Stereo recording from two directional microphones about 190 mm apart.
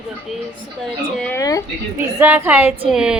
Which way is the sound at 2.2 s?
10° right (ahead or behind).